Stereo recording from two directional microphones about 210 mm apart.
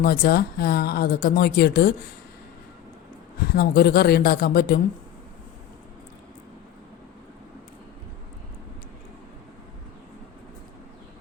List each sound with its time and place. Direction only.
0.0 s speech: 45° left (ahead or behind)
3.4 s speech: 45° left (ahead or behind)